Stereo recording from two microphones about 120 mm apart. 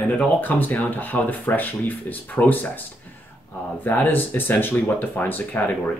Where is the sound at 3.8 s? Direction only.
15° left (ahead or behind).